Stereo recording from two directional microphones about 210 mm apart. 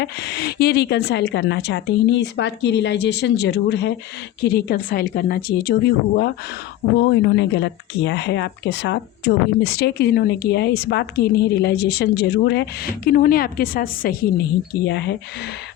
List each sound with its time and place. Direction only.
0.0 s a woman's voice: 50° left (ahead or behind)
14.8 s speech: 55° left (ahead or behind)